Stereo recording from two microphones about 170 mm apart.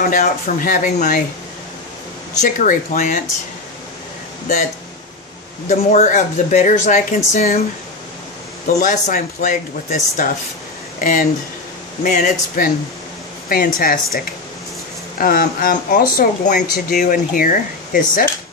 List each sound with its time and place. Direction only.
0.0 s speech: 50° left (ahead or behind)
2.4 s speech: 50° left (ahead or behind)
5.7 s speech: 40° left (ahead or behind)
8.8 s speech: 45° left (ahead or behind)
13.7 s speech: 55° left (ahead or behind)